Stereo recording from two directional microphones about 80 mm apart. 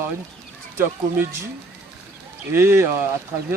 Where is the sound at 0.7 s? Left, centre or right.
Right.